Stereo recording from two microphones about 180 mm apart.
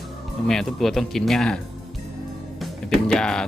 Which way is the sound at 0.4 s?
Centre (ahead or behind).